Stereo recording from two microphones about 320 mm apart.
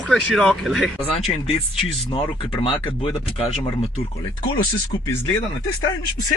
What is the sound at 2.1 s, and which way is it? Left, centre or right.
Speech, centre.